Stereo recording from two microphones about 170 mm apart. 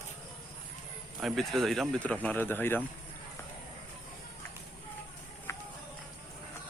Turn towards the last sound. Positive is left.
turn(degrees=15)  # may be behind; listen again after turning